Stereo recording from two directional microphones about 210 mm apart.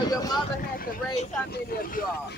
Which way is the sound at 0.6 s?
40° left (ahead or behind).